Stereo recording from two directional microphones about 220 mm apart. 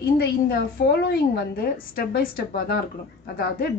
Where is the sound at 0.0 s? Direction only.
45° left (ahead or behind).